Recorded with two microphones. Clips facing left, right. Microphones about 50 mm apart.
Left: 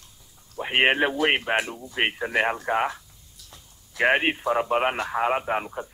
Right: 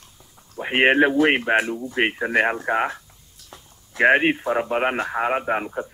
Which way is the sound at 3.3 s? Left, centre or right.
Right.